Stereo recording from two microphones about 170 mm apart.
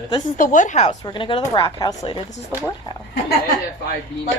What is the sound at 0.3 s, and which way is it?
Speech, 50° left (ahead or behind).